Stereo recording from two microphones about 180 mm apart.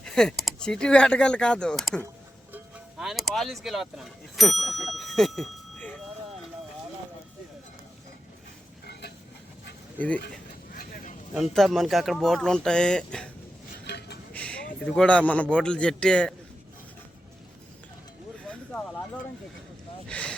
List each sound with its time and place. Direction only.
0.0 s speech: 5° left (ahead or behind)
4.9 s bicycle bell: centre (ahead or behind)
8.9 s a sound: 65° left (ahead or behind)
10.8 s vehicle: 55° left (ahead or behind)
11.3 s speech: centre (ahead or behind)
13.8 s a sound: 65° left (ahead or behind)
14.3 s a man's voice: 5° left (ahead or behind)
18.4 s speech: 5° left (ahead or behind)
20.1 s a sound: 5° left (ahead or behind)